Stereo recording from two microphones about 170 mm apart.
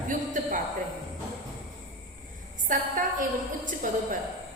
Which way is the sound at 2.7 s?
50° right (ahead or behind).